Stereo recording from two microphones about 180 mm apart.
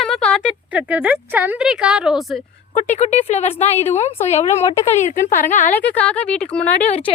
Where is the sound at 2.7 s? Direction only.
40° left (ahead or behind).